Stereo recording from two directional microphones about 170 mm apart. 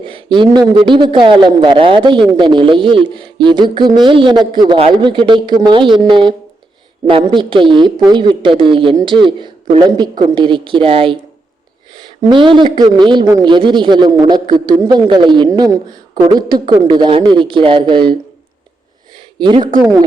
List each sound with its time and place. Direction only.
0.0 s a man's voice: 30° right (ahead or behind)
12.2 s a man's voice: 30° right (ahead or behind)
19.4 s a man's voice: 30° right (ahead or behind)